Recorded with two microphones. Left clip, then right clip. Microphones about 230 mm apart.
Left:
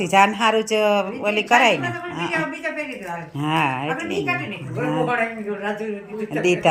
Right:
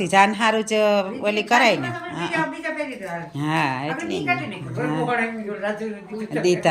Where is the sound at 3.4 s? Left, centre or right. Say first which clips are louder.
Left 2 dB; centre.